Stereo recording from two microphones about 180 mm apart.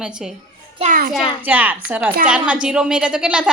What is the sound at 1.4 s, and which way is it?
A woman's voice, 10° right (ahead or behind).